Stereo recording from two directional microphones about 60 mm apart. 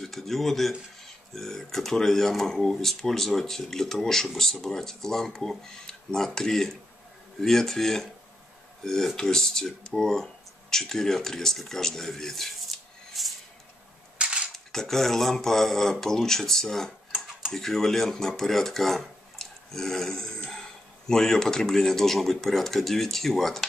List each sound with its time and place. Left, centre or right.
0.0 s speech: centre
14.1 s cap gun: centre
14.5 s speech: centre